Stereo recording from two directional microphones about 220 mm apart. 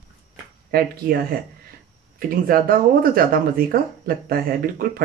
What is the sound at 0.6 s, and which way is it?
Speech, 45° right (ahead or behind).